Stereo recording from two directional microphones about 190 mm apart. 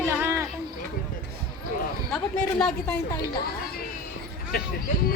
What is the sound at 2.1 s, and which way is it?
Speech, 5° left (ahead or behind).